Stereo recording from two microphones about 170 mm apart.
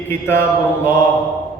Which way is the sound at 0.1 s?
10° left (ahead or behind).